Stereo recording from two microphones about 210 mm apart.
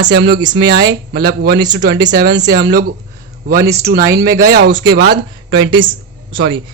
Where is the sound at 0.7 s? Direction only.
50° right (ahead or behind).